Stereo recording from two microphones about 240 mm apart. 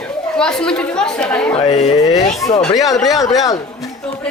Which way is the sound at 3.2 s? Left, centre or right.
Centre.